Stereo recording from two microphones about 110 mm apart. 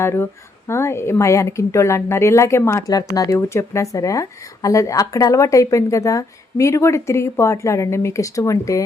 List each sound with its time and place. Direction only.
0.0 s a woman's voice: 25° left (ahead or behind)